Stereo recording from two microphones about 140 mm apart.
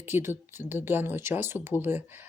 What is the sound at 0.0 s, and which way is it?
Speech, 15° right (ahead or behind).